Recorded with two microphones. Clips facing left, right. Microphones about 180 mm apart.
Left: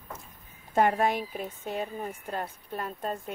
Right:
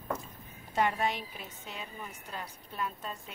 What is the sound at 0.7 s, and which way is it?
A woman's voice, 50° left (ahead or behind).